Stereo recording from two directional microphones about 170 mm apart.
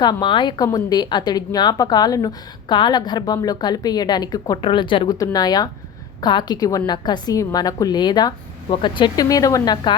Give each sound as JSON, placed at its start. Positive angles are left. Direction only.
{"t": 0.0, "sound": "a woman's voice", "side_deg": 25}